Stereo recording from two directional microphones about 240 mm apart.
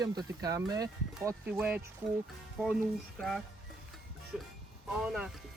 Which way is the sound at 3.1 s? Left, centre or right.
Centre.